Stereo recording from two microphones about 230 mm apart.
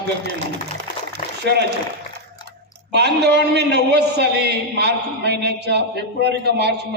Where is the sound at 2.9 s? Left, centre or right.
Right.